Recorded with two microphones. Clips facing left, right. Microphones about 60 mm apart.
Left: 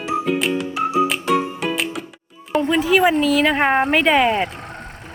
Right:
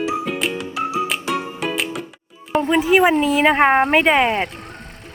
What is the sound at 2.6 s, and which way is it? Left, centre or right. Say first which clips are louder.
Speech: right 1 dB; centre.